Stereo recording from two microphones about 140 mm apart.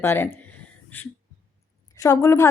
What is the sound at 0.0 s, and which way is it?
A woman's voice, 15° left (ahead or behind).